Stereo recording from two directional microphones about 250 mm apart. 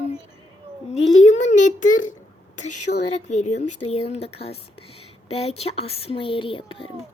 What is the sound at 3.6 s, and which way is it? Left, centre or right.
Speech, left.